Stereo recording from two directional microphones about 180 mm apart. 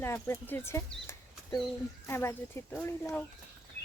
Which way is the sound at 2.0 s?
15° left (ahead or behind).